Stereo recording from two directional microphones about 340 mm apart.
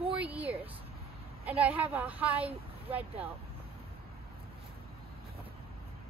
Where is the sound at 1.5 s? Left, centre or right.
Centre.